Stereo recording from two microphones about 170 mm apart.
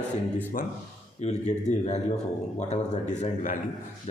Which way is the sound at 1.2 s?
40° left (ahead or behind).